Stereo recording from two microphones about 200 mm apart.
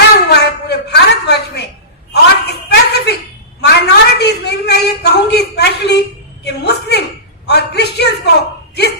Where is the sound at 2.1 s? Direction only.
55° left (ahead or behind).